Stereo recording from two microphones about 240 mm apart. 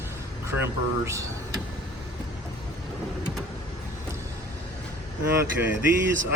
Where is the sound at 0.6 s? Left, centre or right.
Centre.